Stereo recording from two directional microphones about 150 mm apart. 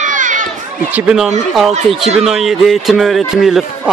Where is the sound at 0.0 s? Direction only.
60° right (ahead or behind).